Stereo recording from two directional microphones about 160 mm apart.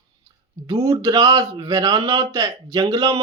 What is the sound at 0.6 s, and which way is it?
Speech, 25° right (ahead or behind).